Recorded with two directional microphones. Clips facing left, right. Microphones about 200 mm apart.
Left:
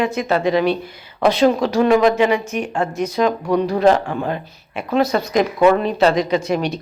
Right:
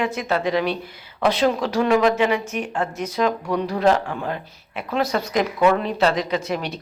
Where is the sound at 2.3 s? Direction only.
5° right (ahead or behind).